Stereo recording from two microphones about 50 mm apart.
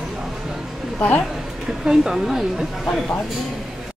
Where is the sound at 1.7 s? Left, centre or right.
Centre.